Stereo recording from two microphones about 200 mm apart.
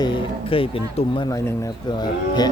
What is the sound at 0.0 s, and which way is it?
Speech, 25° left (ahead or behind).